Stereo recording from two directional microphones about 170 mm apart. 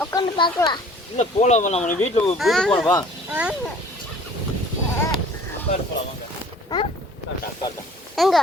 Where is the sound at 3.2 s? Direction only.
10° right (ahead or behind).